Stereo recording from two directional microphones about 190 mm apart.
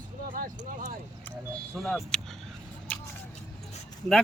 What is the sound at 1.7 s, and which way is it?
Speech, centre (ahead or behind).